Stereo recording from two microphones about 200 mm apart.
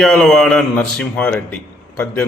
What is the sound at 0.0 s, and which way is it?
Speech, centre (ahead or behind).